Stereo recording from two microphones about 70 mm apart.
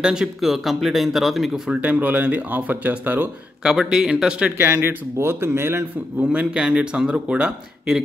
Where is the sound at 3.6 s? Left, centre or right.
Centre.